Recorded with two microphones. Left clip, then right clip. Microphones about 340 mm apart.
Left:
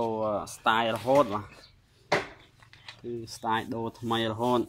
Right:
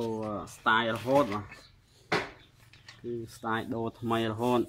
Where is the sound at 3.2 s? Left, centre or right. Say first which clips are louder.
Left 5 dB; centre.